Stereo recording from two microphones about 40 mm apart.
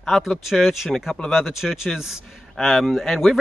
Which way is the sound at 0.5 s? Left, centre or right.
Centre.